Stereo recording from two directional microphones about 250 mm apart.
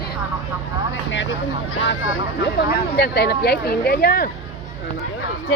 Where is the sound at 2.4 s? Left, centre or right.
Left.